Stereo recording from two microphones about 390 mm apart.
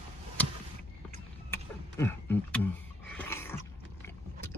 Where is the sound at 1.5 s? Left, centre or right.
Centre.